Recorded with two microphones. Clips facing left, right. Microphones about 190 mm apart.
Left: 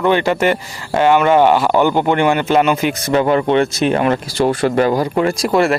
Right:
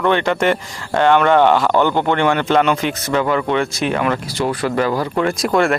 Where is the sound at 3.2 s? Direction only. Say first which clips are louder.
Left 5 dB; 25° left (ahead or behind).